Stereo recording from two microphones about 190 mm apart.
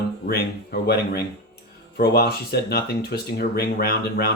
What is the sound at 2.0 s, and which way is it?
Speech, 60° left (ahead or behind).